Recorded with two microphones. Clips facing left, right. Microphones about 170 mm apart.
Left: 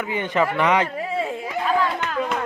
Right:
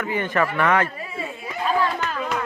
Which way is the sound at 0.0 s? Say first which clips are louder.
Left 1 dB; 15° left (ahead or behind).